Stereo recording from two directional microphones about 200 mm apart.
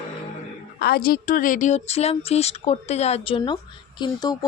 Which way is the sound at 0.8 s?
50° left (ahead or behind).